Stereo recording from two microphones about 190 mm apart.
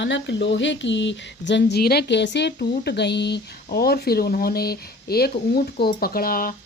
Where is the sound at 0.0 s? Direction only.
70° left (ahead or behind).